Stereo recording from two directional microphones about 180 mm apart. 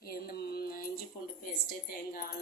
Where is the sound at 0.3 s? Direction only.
55° left (ahead or behind).